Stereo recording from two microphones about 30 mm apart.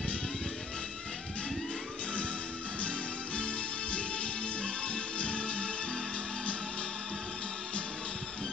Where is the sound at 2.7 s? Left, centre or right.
Left.